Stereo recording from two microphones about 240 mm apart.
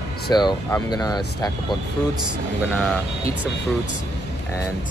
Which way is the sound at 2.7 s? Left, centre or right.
Centre.